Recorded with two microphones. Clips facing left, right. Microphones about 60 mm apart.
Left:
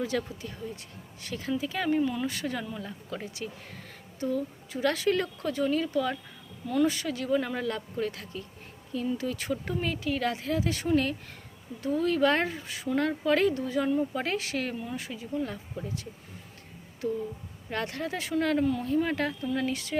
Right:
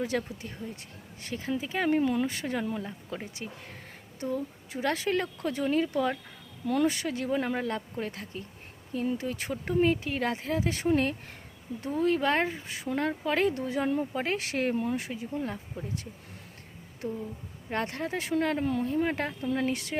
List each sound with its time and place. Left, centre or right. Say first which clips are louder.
0.0 s speech: even; right
1.9 s speech: right 1 dB; right
13.5 s speech: left 1 dB; right
14.3 s speech: right 3 dB; right
17.7 s speech: right 1 dB; right